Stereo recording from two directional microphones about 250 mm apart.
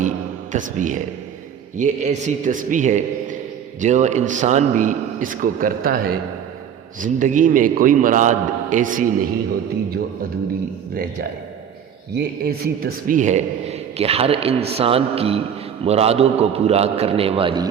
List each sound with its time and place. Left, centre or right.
0.5 s a man's voice: right
10.9 s a man's voice: right; by 17.7 s centre